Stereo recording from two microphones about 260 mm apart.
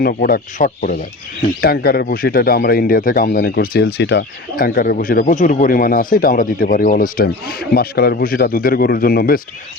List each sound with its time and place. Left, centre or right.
0.0 s speech: left